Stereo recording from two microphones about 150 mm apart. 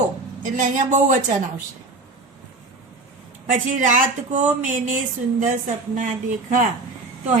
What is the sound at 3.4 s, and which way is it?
Speech, 60° right (ahead or behind).